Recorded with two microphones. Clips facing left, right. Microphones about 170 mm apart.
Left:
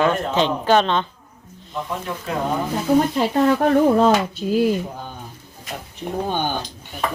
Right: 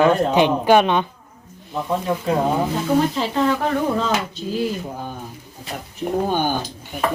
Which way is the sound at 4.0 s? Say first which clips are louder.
Left 6 dB; 50° left (ahead or behind).